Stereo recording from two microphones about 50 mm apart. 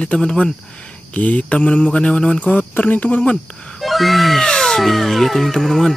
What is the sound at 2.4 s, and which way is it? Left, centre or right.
Speech, left.